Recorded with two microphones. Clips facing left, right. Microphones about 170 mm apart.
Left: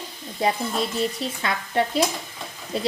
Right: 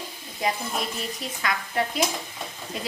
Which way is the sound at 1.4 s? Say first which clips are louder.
Left 3 dB; 30° left (ahead or behind).